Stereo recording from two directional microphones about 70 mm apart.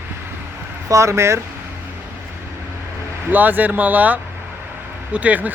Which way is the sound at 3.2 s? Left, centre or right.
Right.